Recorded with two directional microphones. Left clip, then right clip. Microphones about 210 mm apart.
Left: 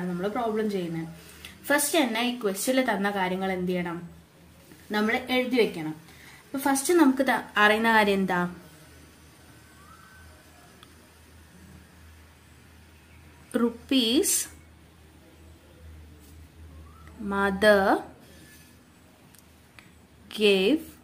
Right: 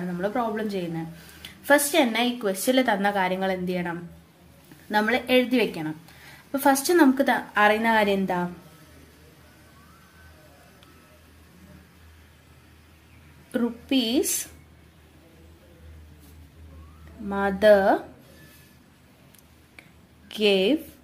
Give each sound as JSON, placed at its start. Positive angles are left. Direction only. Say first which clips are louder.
{"t": 0.2, "sound": "a woman's voice", "louder": "right 1 dB", "side_deg": -25}
{"t": 4.9, "sound": "a woman's voice", "louder": "right 5 dB", "side_deg": -25}
{"t": 7.2, "sound": "a woman's voice", "louder": "right 2 dB", "side_deg": -10}
{"t": 13.5, "sound": "a woman's voice", "louder": "even", "side_deg": 0}
{"t": 17.3, "sound": "a woman's voice", "louder": "right 3 dB", "side_deg": 0}
{"t": 20.2, "sound": "speech", "louder": "right 1 dB", "side_deg": -5}